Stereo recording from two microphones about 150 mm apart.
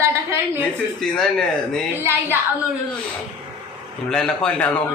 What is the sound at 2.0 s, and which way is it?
Speech, 15° right (ahead or behind).